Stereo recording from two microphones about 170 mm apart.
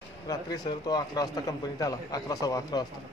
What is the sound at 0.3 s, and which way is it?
A man's voice, 25° left (ahead or behind).